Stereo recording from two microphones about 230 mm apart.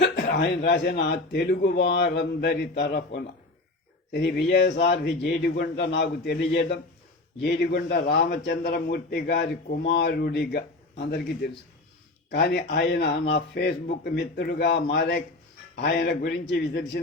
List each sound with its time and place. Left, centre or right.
0.0 s speech: left